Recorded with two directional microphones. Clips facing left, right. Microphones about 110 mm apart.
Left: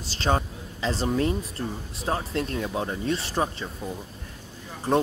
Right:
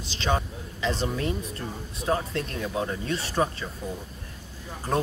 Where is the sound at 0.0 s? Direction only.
40° left (ahead or behind).